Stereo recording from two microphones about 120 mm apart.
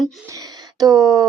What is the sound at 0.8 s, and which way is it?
Speech, 30° right (ahead or behind).